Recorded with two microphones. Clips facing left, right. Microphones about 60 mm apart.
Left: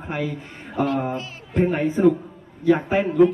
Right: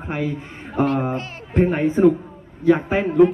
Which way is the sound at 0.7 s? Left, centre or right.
Right.